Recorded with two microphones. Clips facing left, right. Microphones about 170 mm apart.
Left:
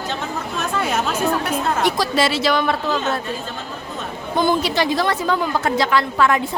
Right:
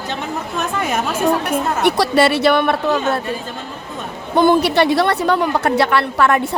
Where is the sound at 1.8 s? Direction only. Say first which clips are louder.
Right 7 dB; 65° right (ahead or behind).